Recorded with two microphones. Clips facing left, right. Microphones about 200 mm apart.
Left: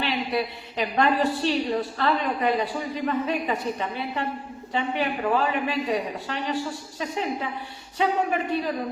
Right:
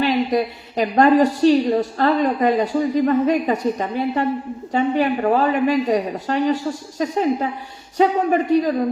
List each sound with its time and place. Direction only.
0.0 s a woman's voice: 45° right (ahead or behind)